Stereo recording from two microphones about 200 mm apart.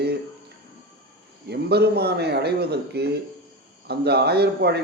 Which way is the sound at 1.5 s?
55° right (ahead or behind).